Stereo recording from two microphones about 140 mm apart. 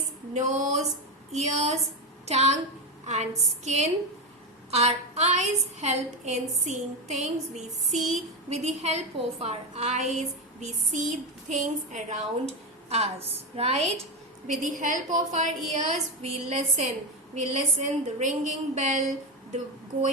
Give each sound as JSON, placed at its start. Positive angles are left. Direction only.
{"t": 0.3, "sound": "a woman's voice", "side_deg": -65}
{"t": 14.6, "sound": "a woman's voice", "side_deg": -65}